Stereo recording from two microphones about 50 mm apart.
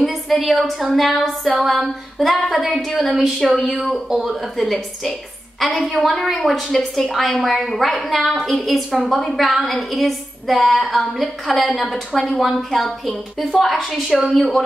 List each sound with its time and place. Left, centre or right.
0.0 s a woman's voice: centre